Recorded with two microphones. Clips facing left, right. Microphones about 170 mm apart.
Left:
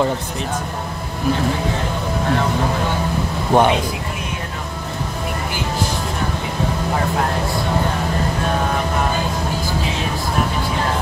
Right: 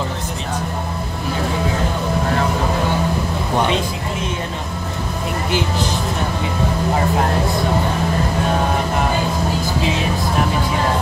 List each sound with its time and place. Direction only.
3.5 s speech: 55° left (ahead or behind)